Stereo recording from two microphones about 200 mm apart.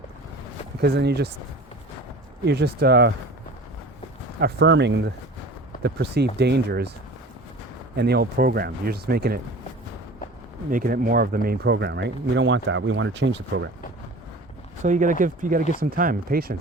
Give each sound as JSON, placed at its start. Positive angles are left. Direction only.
{"t": 0.8, "sound": "speech", "side_deg": -55}
{"t": 2.5, "sound": "speech", "side_deg": -55}
{"t": 4.4, "sound": "speech", "side_deg": -55}
{"t": 7.9, "sound": "speech", "side_deg": -55}
{"t": 10.7, "sound": "speech", "side_deg": -45}
{"t": 14.8, "sound": "speech", "side_deg": -40}